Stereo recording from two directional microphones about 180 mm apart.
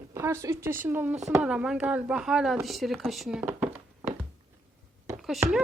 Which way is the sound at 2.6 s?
Centre (ahead or behind).